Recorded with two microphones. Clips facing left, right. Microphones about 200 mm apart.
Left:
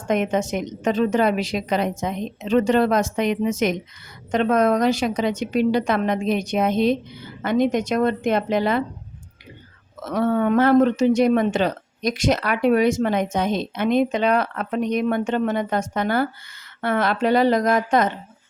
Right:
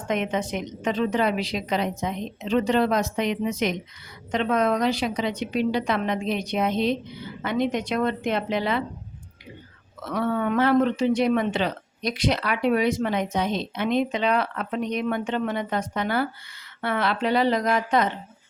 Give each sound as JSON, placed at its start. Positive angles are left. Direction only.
{"t": 0.1, "sound": "speech", "side_deg": 45}
{"t": 10.0, "sound": "speech", "side_deg": 40}